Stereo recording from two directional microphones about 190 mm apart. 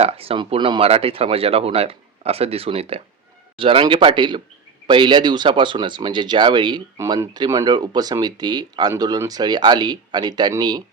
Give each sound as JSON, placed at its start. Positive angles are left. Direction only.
{"t": 0.0, "sound": "speech", "side_deg": -30}